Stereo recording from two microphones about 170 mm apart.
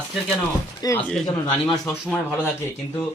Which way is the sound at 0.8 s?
20° left (ahead or behind).